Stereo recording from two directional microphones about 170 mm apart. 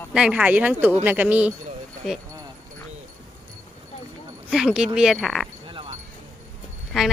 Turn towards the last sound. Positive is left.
turn(degrees=0)  # may be behind; listen again after turning